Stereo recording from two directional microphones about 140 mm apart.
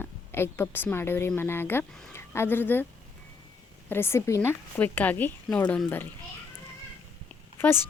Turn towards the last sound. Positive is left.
turn(degrees=15)  # may be behind; listen again after turning